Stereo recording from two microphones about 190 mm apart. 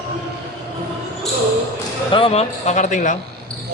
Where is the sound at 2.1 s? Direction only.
30° left (ahead or behind).